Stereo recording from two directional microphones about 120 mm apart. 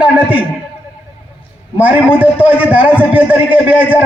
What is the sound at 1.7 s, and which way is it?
A man's voice, 10° right (ahead or behind).